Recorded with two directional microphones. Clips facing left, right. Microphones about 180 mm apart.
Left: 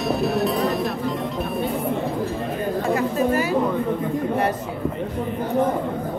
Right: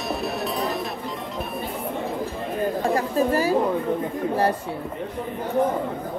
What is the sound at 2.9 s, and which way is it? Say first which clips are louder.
Chatter: left 2 dB; 35° right (ahead or behind).